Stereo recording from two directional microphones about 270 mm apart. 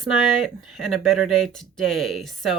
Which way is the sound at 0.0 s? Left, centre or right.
Centre.